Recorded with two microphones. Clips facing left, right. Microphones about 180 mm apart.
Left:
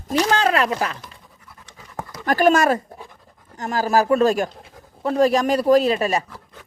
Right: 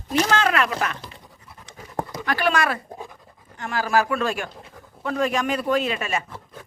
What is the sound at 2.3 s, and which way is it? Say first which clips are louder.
A man's voice: left 7 dB; 45° left (ahead or behind).